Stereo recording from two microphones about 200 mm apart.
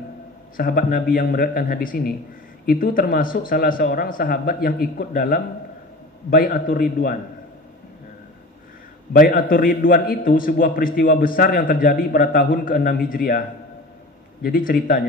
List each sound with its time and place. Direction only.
0.6 s a man's voice: 45° left (ahead or behind)
9.1 s a man's voice: 45° left (ahead or behind)
14.4 s a man's voice: 45° left (ahead or behind)